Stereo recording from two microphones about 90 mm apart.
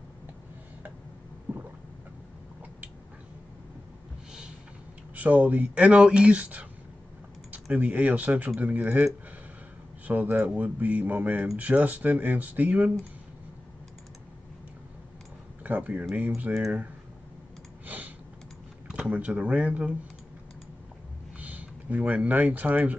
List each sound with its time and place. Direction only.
5.1 s speech: 15° right (ahead or behind)
7.7 s speech: 15° right (ahead or behind)
10.3 s speech: 15° right (ahead or behind)
15.6 s speech: 15° right (ahead or behind)
17.8 s typing: 20° right (ahead or behind)
18.9 s speech: 10° right (ahead or behind)
21.4 s speech: 15° right (ahead or behind)